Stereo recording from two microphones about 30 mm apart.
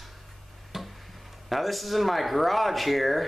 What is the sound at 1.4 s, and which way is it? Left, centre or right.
Speech, centre.